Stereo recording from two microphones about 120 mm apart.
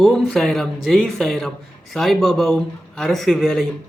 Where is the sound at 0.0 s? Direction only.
Centre (ahead or behind).